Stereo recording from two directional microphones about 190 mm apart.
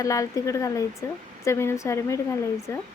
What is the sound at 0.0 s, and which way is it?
Speech, 15° left (ahead or behind).